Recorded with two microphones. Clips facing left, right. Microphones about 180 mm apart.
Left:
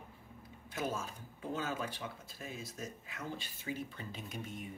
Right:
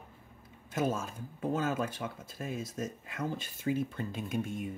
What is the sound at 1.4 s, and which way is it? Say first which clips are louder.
Speech: right 7 dB; 50° right (ahead or behind).